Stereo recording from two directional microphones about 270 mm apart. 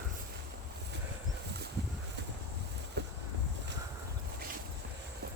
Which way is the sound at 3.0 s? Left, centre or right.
Right.